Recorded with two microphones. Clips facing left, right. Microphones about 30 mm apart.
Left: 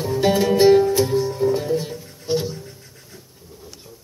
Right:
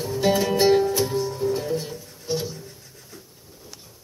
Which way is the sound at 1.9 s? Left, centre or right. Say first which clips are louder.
Left 5 dB; left.